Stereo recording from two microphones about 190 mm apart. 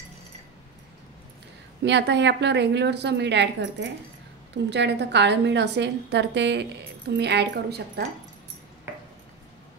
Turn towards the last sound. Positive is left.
turn(degrees=-60)  # may be behind; listen again after turning